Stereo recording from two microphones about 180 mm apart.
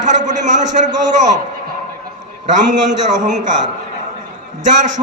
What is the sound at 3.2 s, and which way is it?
Speech, 45° right (ahead or behind).